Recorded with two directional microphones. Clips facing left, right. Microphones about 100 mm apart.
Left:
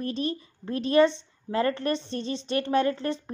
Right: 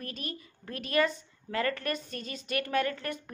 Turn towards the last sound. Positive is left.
turn(degrees=30)  # may be behind; listen again after turning